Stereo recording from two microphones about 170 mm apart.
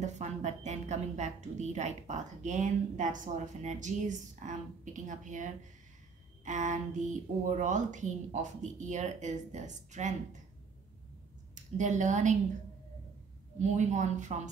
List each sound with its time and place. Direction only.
0.0 s a woman's voice: 40° right (ahead or behind)
11.5 s a woman's voice: 45° right (ahead or behind)
13.6 s a woman's voice: 45° right (ahead or behind)